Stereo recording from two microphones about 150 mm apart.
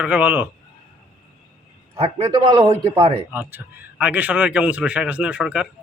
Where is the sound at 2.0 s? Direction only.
40° right (ahead or behind).